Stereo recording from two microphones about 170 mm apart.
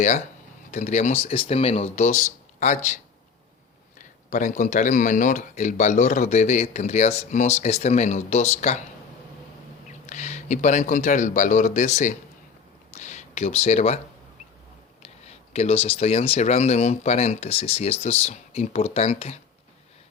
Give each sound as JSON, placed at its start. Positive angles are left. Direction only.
{"t": 0.7, "sound": "speech", "side_deg": 45}
{"t": 10.1, "sound": "speech", "side_deg": 45}
{"t": 12.9, "sound": "a sound", "side_deg": 45}
{"t": 15.0, "sound": "speech", "side_deg": 40}